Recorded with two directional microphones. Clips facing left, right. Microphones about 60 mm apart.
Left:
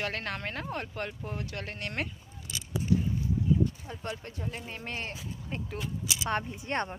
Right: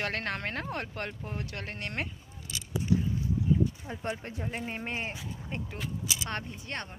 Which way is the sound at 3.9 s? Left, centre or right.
Right.